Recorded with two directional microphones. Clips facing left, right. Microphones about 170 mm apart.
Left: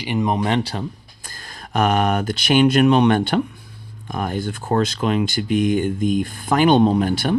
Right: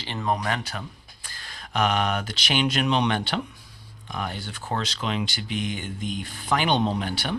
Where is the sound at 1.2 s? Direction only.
45° left (ahead or behind).